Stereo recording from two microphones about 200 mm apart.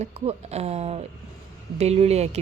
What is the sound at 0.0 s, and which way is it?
Speech, 30° right (ahead or behind).